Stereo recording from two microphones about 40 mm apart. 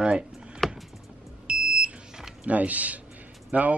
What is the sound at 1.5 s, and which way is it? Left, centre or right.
Smoke detector, right.